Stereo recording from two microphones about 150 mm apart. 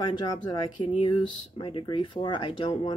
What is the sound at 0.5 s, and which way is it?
Speech, 35° left (ahead or behind).